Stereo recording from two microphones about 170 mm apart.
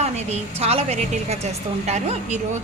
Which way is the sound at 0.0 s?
40° right (ahead or behind).